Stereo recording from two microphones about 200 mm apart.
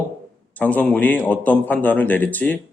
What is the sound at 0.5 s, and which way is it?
A man's voice, 5° left (ahead or behind).